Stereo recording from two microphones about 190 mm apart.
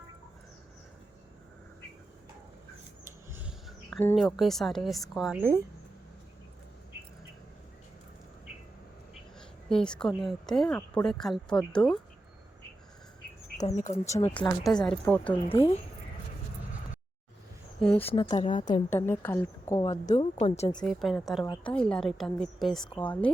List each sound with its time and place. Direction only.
3.3 s a sound: 5° right (ahead or behind)
4.1 s a woman's voice: centre (ahead or behind)
9.4 s a sound: 5° left (ahead or behind)
10.2 s a woman's voice: centre (ahead or behind)
13.7 s speech: 35° left (ahead or behind)
14.3 s a woman's voice: 10° left (ahead or behind)
15.4 s speech: 30° left (ahead or behind)
17.7 s speech: 5° left (ahead or behind)
18.1 s speech: 25° left (ahead or behind)
18.4 s speech: 40° left (ahead or behind)
18.7 s a woman's voice: 10° left (ahead or behind)
19.9 s speech: 40° left (ahead or behind)
20.4 s speech: 25° left (ahead or behind)
20.8 s a woman's voice: centre (ahead or behind)